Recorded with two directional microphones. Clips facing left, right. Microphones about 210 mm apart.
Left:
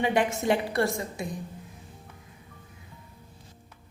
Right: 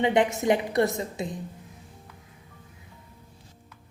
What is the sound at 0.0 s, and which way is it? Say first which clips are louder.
A woman's voice: right 3 dB; 20° right (ahead or behind).